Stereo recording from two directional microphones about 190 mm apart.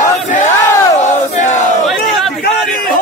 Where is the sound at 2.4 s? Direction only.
50° left (ahead or behind).